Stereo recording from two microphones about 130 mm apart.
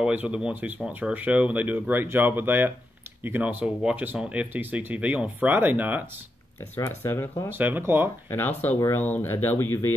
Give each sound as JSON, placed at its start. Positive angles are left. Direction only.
{"t": 0.0, "sound": "speech", "side_deg": -10}
{"t": 6.8, "sound": "speech", "side_deg": 20}
{"t": 7.5, "sound": "speech", "side_deg": -15}
{"t": 8.7, "sound": "speech", "side_deg": 20}